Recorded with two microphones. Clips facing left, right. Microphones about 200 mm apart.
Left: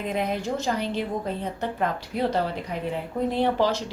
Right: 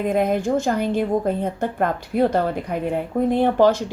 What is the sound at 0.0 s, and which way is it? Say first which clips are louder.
A woman's voice: right 7 dB; 50° right (ahead or behind).